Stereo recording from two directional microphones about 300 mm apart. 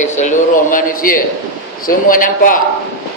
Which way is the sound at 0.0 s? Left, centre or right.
Left.